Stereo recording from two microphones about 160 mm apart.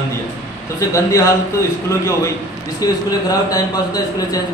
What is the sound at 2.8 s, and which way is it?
Speech, 25° left (ahead or behind).